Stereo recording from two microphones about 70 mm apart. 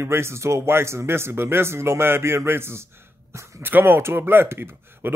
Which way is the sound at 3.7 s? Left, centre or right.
Right.